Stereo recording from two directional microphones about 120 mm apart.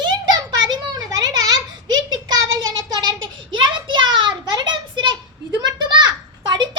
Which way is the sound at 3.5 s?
40° right (ahead or behind).